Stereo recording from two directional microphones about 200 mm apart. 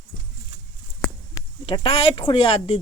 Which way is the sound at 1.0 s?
5° left (ahead or behind).